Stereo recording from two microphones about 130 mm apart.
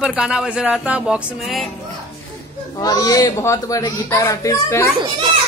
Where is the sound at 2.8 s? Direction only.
30° left (ahead or behind).